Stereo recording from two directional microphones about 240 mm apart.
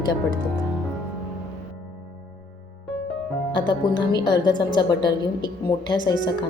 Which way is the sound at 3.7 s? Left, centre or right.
Centre.